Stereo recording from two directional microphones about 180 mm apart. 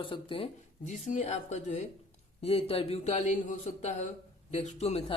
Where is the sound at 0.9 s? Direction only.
40° left (ahead or behind).